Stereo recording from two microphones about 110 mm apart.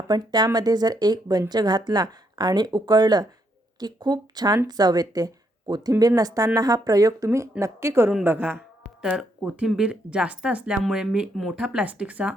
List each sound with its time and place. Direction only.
0.1 s a woman's voice: 40° right (ahead or behind); by 8.5 s 20° right (ahead or behind)
9.0 s speech: 5° right (ahead or behind)